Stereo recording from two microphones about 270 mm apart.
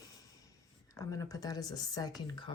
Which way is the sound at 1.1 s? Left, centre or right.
Centre.